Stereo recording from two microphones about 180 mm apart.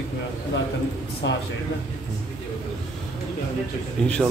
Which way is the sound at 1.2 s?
85° left.